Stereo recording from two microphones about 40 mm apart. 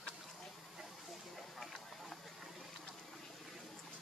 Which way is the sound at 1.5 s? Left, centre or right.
Centre.